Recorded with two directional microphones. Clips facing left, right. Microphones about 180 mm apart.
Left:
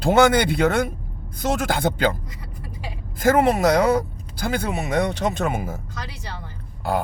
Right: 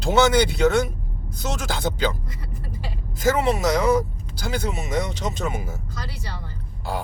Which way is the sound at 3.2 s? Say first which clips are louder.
Left 3 dB; 55° left (ahead or behind).